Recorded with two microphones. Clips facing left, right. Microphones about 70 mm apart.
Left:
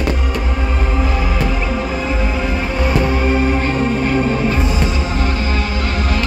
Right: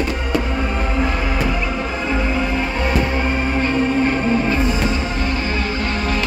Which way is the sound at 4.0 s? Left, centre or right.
Right.